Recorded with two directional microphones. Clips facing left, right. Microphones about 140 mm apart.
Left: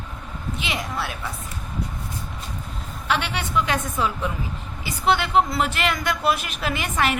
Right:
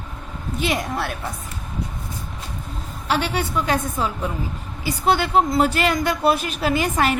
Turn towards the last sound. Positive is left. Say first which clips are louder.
# right 4 dB
turn(degrees=-35)  # may be behind; listen again after turning